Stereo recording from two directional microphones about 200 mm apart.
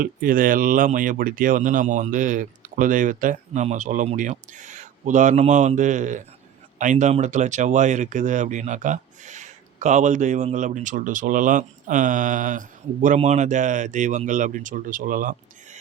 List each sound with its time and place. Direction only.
0.0 s speech: 45° right (ahead or behind)